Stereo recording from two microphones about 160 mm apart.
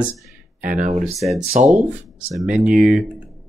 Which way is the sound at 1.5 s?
50° right (ahead or behind).